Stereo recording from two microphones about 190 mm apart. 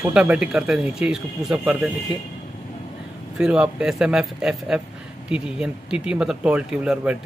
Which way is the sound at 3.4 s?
5° right (ahead or behind).